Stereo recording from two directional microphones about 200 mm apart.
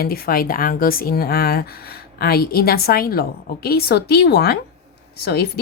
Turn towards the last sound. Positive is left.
turn(degrees=55)  # may be behind; listen again after turning